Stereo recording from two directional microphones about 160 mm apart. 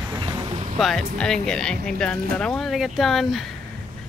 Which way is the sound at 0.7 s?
Centre (ahead or behind).